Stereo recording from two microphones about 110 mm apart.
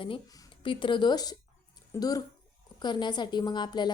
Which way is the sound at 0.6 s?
50° left (ahead or behind).